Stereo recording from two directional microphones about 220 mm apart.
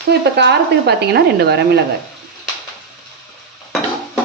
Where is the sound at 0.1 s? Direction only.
50° right (ahead or behind).